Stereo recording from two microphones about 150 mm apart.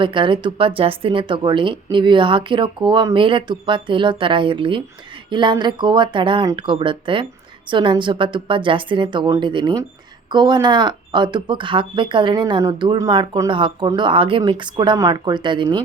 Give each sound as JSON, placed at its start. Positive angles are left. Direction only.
{"t": 0.0, "sound": "speech", "side_deg": -35}